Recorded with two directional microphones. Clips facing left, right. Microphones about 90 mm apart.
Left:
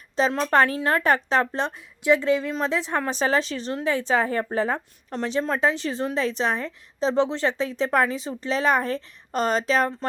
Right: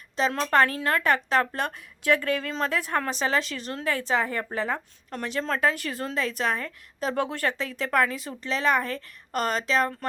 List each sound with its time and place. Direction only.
0.5 s a woman's voice: 25° left (ahead or behind)
1.0 s a woman's voice: 35° left (ahead or behind)
3.1 s a woman's voice: 35° left (ahead or behind)